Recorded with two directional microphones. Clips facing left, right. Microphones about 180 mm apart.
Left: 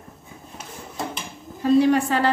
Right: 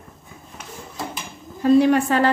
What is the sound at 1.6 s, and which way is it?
Speech, 55° right (ahead or behind).